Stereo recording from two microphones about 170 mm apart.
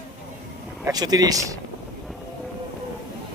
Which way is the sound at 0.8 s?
25° right (ahead or behind).